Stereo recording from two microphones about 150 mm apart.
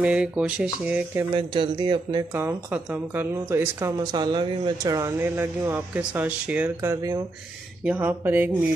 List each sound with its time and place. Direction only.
0.0 s speech: 5° right (ahead or behind)
1.3 s a man's voice: 35° right (ahead or behind)
2.3 s speech: 15° right (ahead or behind)
4.0 s speech: 30° right (ahead or behind)
7.8 s speech: 10° right (ahead or behind)